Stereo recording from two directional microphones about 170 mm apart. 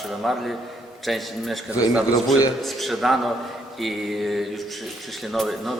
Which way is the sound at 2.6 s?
Centre (ahead or behind).